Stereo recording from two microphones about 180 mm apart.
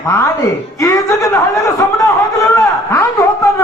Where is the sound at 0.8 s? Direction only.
15° left (ahead or behind).